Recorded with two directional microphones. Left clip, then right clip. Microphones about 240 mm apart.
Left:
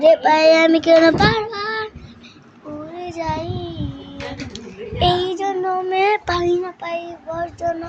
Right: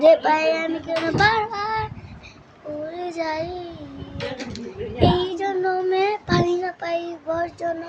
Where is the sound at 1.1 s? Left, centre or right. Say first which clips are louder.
Left 1 dB; centre.